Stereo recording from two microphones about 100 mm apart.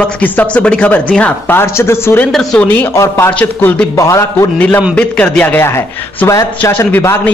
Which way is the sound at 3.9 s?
35° left (ahead or behind).